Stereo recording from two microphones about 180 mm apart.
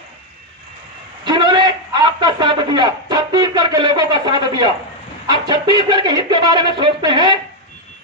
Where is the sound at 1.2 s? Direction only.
25° right (ahead or behind).